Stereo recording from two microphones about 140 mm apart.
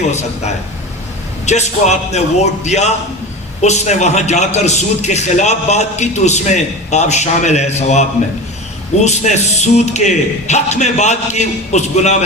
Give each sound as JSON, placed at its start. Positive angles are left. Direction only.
{"t": 0.1, "sound": "a man's voice", "side_deg": 55}